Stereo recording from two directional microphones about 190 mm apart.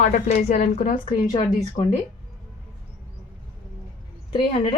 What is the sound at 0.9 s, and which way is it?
Speech, 25° left (ahead or behind).